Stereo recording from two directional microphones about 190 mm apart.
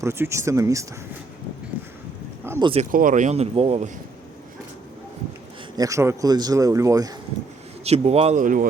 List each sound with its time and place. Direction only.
0.0 s speech: 15° right (ahead or behind)
2.4 s a sound: 10° right (ahead or behind)
2.9 s speech: 45° right (ahead or behind)
5.7 s a man's voice: 15° right (ahead or behind)
7.9 s speech: 35° right (ahead or behind)